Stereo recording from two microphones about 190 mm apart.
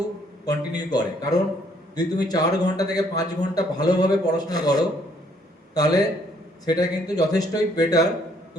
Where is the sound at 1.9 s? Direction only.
20° left (ahead or behind).